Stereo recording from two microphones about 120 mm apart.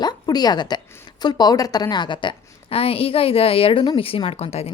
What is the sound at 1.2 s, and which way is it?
A woman's voice, 35° left (ahead or behind).